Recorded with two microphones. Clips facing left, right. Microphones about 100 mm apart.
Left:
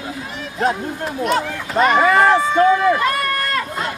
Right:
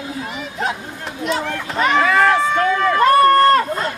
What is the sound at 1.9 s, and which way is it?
Run, 20° left (ahead or behind).